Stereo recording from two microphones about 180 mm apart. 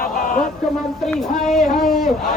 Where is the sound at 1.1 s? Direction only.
Centre (ahead or behind).